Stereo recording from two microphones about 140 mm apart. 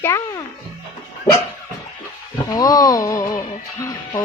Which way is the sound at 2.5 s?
25° left (ahead or behind).